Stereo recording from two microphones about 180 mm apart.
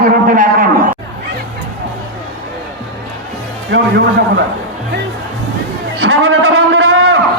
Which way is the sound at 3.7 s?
80° right.